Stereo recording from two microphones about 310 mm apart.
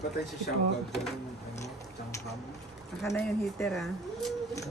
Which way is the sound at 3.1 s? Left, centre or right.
Centre.